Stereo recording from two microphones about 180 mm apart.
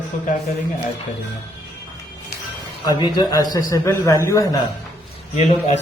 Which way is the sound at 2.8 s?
25° left (ahead or behind).